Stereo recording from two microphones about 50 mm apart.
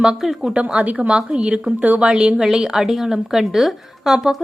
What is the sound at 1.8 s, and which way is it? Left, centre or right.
Speech, right.